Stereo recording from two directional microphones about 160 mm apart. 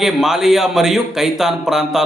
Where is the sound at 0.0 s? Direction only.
Centre (ahead or behind).